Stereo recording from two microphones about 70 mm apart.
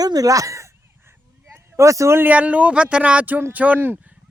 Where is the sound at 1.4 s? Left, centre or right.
Right.